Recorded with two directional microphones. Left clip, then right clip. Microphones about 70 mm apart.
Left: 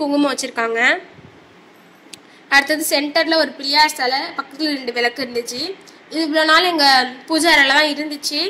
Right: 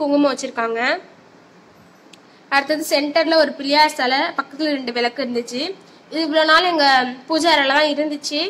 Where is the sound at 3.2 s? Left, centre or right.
Left.